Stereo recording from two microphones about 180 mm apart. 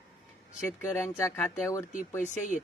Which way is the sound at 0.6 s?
15° left (ahead or behind).